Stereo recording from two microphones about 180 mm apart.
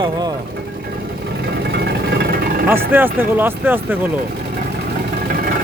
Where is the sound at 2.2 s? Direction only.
55° right (ahead or behind).